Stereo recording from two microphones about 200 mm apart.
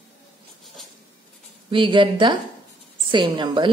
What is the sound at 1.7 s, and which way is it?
Speech, 25° right (ahead or behind).